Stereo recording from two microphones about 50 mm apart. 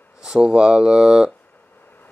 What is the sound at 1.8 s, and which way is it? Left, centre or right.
Vehicle, left.